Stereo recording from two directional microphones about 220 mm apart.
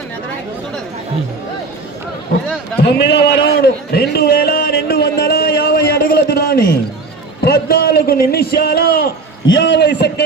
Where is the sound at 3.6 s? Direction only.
45° left (ahead or behind).